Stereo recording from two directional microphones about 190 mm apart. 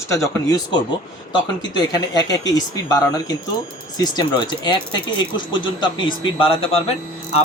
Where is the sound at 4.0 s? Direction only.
25° left (ahead or behind).